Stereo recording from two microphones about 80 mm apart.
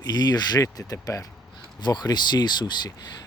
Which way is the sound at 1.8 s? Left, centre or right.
Left.